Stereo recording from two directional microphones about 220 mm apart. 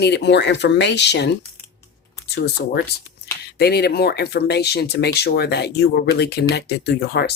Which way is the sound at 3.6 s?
45° left (ahead or behind).